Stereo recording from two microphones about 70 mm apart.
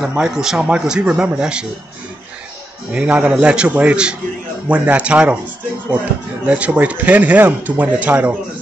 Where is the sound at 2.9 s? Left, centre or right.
Centre.